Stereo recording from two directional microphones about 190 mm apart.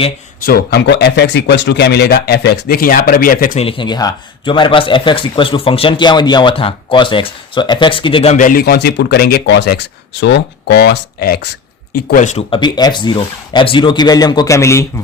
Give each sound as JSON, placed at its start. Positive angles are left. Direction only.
{"t": 0.4, "sound": "speech", "side_deg": 55}
{"t": 3.6, "sound": "speech", "side_deg": 25}